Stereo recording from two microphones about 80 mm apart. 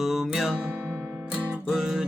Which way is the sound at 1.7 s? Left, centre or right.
Centre.